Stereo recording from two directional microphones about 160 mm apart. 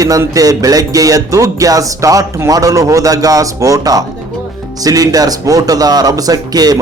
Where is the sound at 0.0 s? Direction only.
20° right (ahead or behind).